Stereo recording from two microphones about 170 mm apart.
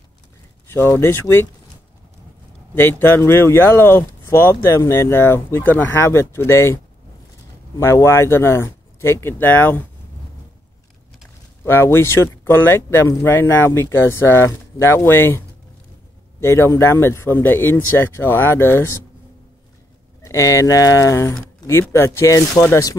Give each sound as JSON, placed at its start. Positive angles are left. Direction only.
{"t": 0.7, "sound": "speech", "side_deg": 15}
{"t": 2.7, "sound": "speech", "side_deg": 15}
{"t": 7.8, "sound": "speech", "side_deg": 15}
{"t": 11.6, "sound": "speech", "side_deg": 15}
{"t": 20.2, "sound": "speech", "side_deg": 15}